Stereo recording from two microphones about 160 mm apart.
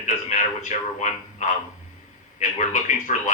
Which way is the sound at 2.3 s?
50° left (ahead or behind).